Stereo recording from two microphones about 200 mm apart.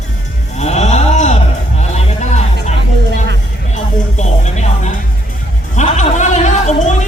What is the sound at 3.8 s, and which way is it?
Music, 35° left (ahead or behind).